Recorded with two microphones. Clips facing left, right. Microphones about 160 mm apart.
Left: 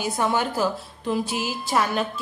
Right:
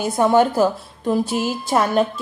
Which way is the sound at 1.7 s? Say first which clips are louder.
Right 6 dB; 45° right (ahead or behind).